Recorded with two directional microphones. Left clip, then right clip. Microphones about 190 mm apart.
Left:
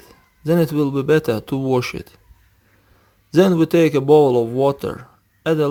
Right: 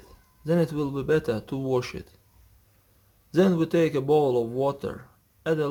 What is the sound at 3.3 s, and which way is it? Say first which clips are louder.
A man's voice: left 8 dB; 35° left (ahead or behind).